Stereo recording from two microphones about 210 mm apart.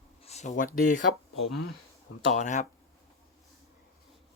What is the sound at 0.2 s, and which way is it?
Speech, 30° left (ahead or behind).